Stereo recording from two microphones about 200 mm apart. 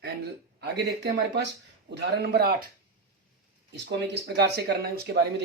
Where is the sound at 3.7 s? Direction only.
60° right (ahead or behind).